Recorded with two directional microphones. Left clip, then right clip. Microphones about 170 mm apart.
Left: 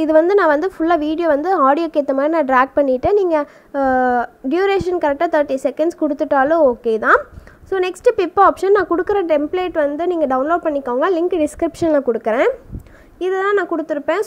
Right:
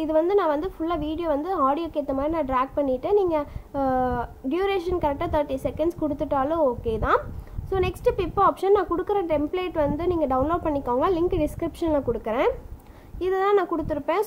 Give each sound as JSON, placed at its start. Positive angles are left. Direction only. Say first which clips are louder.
{"t": 0.3, "sound": "a woman's voice", "louder": "left 8 dB", "side_deg": 35}